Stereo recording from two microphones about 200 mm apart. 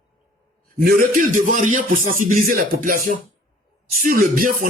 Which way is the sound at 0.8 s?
45° right (ahead or behind).